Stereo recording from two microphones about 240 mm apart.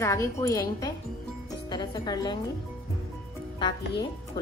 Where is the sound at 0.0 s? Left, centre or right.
Centre.